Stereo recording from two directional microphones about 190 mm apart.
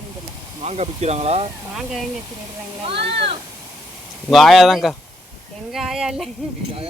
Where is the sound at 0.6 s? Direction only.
35° right (ahead or behind).